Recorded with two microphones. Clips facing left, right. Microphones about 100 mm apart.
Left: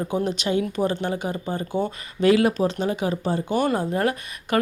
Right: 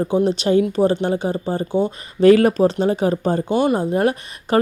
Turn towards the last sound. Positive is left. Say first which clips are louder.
# right 5 dB
turn(degrees=-30)  # may be behind; listen again after turning